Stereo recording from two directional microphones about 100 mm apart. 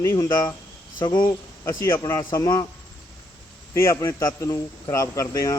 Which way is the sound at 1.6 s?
30° left (ahead or behind).